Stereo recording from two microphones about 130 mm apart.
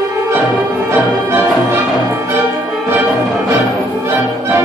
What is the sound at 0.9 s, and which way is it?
Music, 15° right (ahead or behind).